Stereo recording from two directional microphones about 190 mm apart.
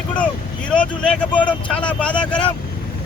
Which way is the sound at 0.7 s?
5° left (ahead or behind).